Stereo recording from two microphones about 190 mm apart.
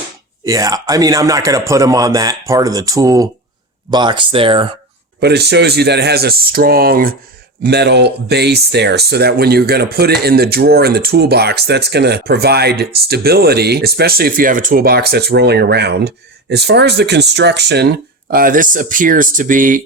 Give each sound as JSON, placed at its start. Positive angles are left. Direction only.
{"t": 0.4, "sound": "speech", "side_deg": -20}
{"t": 5.2, "sound": "speech", "side_deg": -60}